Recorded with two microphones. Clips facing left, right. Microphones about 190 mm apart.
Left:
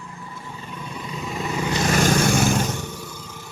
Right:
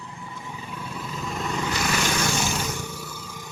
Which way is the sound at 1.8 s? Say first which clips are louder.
Left 9 dB; 40° left (ahead or behind).